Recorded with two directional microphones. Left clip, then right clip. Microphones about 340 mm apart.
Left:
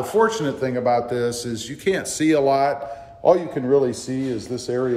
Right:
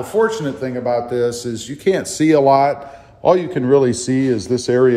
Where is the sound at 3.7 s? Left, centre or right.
Right.